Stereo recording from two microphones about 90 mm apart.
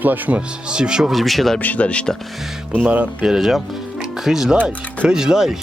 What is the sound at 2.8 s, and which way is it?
Speech, 15° right (ahead or behind).